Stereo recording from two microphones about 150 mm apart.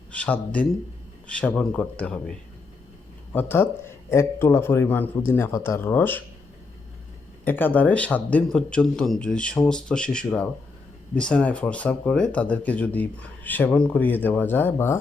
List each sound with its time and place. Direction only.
0.2 s speech: 10° left (ahead or behind)
3.3 s speech: 15° left (ahead or behind)
7.4 s speech: 10° left (ahead or behind)